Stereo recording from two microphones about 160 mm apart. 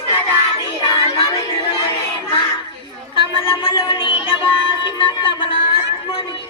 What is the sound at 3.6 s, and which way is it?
Music, 35° left (ahead or behind).